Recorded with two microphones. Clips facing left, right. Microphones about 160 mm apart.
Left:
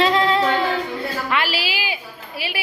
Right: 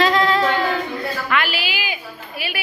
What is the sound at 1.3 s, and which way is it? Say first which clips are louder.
Speech: right 1 dB; 30° left (ahead or behind).